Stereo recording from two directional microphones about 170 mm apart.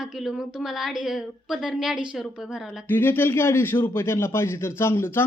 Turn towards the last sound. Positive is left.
turn(degrees=15)  # may be behind; listen again after turning